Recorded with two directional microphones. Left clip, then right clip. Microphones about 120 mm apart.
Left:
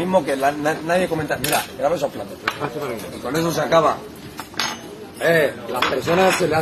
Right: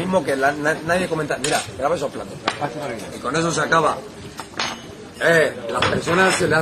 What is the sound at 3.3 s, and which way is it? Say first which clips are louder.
Speech: right 1 dB; 40° right (ahead or behind).